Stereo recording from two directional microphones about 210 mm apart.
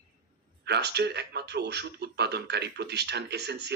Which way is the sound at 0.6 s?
50° right (ahead or behind).